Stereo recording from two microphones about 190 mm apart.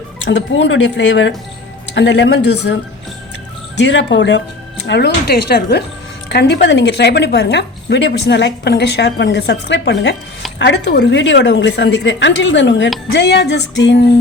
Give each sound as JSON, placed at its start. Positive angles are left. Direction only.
{"t": 0.3, "sound": "a woman's voice", "side_deg": 70}
{"t": 3.8, "sound": "a woman's voice", "side_deg": 75}